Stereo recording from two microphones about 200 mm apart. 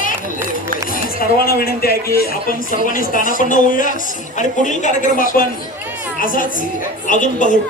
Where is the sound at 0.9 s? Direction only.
45° left (ahead or behind).